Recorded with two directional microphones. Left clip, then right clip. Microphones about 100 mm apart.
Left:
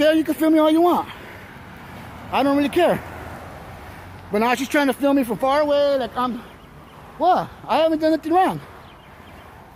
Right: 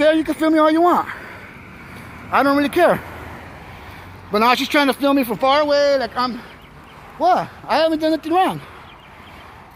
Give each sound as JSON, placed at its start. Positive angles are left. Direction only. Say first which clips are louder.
{"t": 0.0, "sound": "speech", "louder": "right 2 dB", "side_deg": 15}
{"t": 2.3, "sound": "speech", "louder": "right 4 dB", "side_deg": 10}
{"t": 2.6, "sound": "speech", "louder": "right 3 dB", "side_deg": 0}
{"t": 4.3, "sound": "speech", "louder": "right 4 dB", "side_deg": 0}
{"t": 5.4, "sound": "speech", "louder": "right 3 dB", "side_deg": -15}